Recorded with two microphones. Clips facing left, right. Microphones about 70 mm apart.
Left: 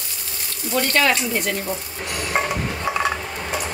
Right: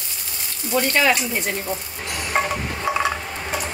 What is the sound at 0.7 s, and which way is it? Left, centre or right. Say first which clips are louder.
Speech: even; centre.